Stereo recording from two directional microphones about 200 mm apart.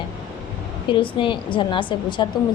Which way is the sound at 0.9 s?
25° left (ahead or behind).